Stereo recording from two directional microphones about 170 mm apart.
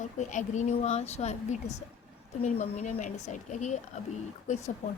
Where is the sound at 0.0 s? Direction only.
45° left (ahead or behind).